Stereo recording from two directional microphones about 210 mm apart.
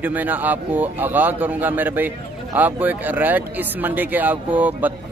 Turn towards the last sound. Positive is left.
turn(degrees=-10)  # may be behind; listen again after turning